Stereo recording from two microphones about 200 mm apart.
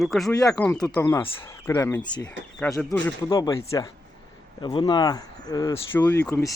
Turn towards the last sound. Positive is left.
turn(degrees=15)  # may be behind; listen again after turning